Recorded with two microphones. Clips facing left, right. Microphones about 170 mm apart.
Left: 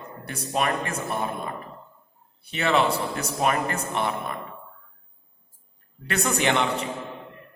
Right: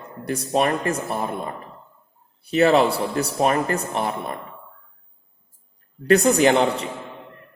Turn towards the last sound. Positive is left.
turn(degrees=-35)  # may be behind; listen again after turning